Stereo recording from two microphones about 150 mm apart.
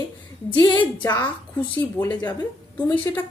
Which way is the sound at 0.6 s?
30° left (ahead or behind).